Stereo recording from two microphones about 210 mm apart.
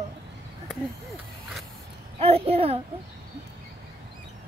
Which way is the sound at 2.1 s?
30° right (ahead or behind).